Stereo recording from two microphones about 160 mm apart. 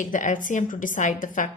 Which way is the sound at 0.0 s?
55° left (ahead or behind).